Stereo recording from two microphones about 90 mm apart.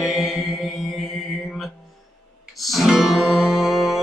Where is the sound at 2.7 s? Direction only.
5° right (ahead or behind).